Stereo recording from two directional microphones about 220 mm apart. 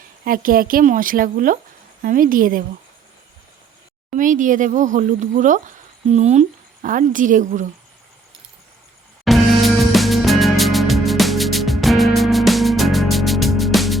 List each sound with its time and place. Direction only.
0.3 s speech: 40° right (ahead or behind)
4.1 s speech: 35° right (ahead or behind)
9.2 s music: centre (ahead or behind)